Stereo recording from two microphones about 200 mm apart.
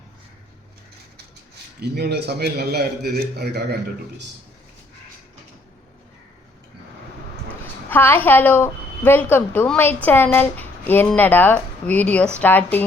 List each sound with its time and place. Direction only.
1.8 s a man's voice: 55° right (ahead or behind)
7.9 s a woman's voice: 10° left (ahead or behind)